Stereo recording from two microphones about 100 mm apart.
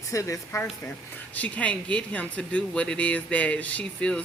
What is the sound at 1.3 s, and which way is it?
Speech, 15° left (ahead or behind).